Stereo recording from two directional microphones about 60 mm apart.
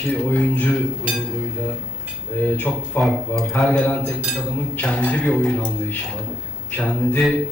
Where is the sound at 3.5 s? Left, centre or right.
Centre.